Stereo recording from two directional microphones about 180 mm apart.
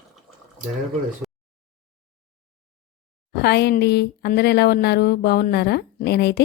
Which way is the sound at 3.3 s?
60° left (ahead or behind).